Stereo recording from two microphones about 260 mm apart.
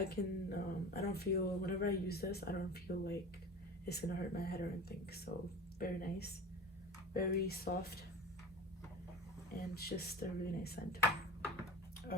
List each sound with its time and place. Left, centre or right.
0.1 s speech: left
9.6 s speech: left